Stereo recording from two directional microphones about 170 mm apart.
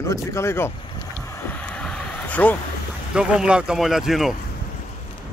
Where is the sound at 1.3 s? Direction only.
10° left (ahead or behind).